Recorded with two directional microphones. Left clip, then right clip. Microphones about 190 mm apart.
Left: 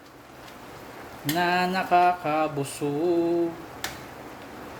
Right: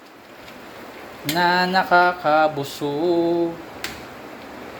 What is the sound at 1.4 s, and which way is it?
Speech, 10° left (ahead or behind).